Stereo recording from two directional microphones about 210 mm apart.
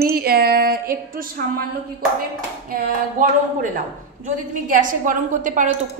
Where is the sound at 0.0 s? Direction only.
45° right (ahead or behind).